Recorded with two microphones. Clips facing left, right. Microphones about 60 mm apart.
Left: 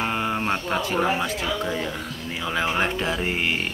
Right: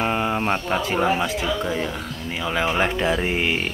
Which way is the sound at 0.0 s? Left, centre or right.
Centre.